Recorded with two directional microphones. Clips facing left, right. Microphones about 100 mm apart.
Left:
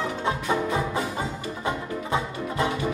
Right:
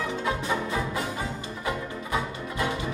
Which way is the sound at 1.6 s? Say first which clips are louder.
Left 2 dB; 25° left (ahead or behind).